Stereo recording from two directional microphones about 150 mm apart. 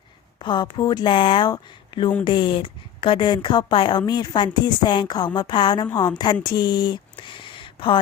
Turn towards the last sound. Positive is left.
turn(degrees=35)  # may be behind; listen again after turning